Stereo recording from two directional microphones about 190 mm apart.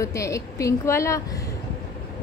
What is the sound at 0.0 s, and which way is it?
A woman's voice, 15° left (ahead or behind).